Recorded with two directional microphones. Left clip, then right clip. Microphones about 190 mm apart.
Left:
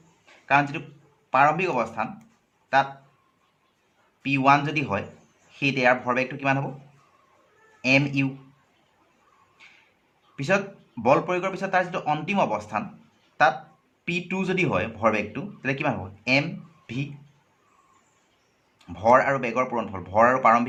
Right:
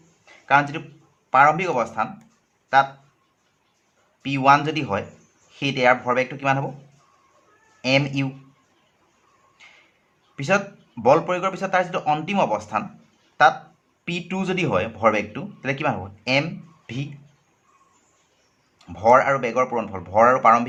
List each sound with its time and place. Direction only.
0.4 s a man's voice: 25° right (ahead or behind)
4.2 s a man's voice: 25° right (ahead or behind)
7.8 s a man's voice: 25° right (ahead or behind)
10.3 s a man's voice: 25° right (ahead or behind)
18.9 s a man's voice: 20° right (ahead or behind)